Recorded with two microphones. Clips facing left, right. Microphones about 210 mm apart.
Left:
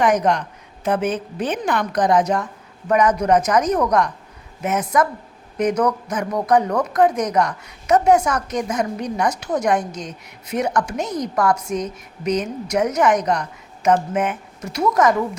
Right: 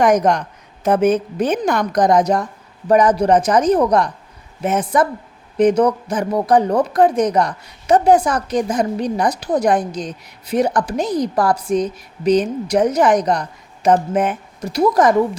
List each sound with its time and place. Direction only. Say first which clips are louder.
0.0 s a woman's voice: right 3 dB; 45° right (ahead or behind)